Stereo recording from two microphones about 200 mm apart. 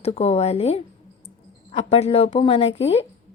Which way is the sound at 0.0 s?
30° left (ahead or behind).